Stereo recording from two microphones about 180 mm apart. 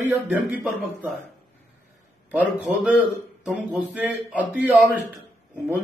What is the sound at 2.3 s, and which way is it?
A man's voice, 5° right (ahead or behind).